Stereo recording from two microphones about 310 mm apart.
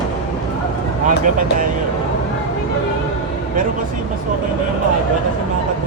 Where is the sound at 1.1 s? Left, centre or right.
Right.